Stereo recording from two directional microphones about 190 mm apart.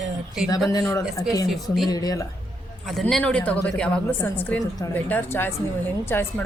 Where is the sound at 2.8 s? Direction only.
Centre (ahead or behind).